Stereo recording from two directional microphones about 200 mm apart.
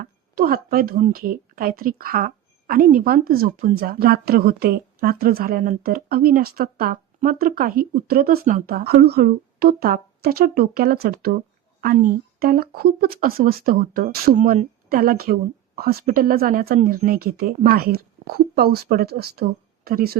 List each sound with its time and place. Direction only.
0.0 s speech: 45° right (ahead or behind)